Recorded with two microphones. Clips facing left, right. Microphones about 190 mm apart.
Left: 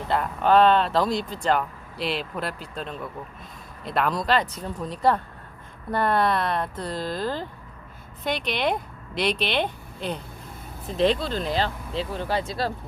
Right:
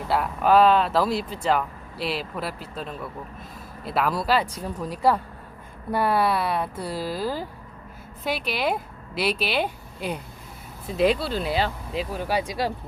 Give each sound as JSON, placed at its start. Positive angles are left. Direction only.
{"t": 0.1, "sound": "speech", "side_deg": -5}